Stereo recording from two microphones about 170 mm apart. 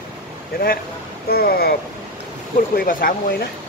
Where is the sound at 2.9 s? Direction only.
55° left (ahead or behind).